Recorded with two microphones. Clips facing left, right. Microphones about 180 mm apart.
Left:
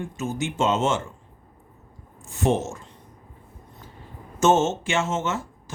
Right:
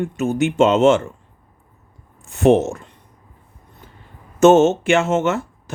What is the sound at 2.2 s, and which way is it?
Speech, 65° right (ahead or behind).